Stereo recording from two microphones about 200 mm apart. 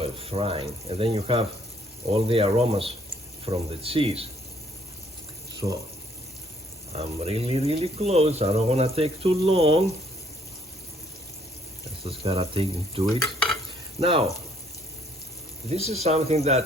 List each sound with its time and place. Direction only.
0.0 s speech: 30° right (ahead or behind)
5.5 s speech: 15° right (ahead or behind)
6.9 s speech: 30° right (ahead or behind)
12.0 s speech: 30° right (ahead or behind)
15.7 s speech: 30° right (ahead or behind)